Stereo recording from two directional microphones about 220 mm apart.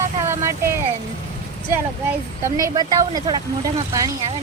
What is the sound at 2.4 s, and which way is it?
Speech, 15° right (ahead or behind).